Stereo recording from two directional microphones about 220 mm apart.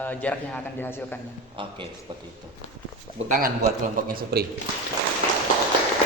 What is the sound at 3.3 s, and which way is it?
A man's voice, 40° right (ahead or behind).